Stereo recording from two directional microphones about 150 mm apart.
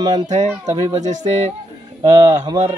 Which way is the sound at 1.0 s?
55° right (ahead or behind).